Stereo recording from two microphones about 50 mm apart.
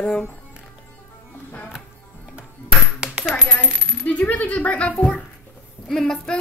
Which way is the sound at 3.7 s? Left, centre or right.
Centre.